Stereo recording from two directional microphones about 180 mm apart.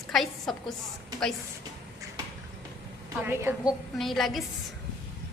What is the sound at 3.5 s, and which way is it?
Speech, 10° right (ahead or behind).